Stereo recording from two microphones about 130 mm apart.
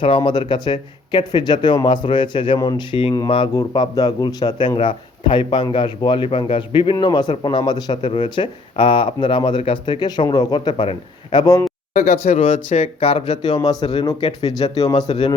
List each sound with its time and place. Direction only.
0.2 s speech: 35° left (ahead or behind)
3.5 s speech: 30° left (ahead or behind)
11.9 s speech: 65° left (ahead or behind)
13.2 s speech: 35° left (ahead or behind)
15.0 s speech: 55° left (ahead or behind)